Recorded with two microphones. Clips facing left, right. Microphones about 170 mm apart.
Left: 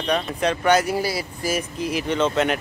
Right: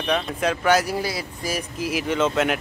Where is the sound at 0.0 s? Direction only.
5° right (ahead or behind).